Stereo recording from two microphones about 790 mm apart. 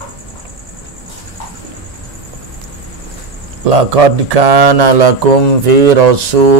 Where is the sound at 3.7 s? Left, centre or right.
Right.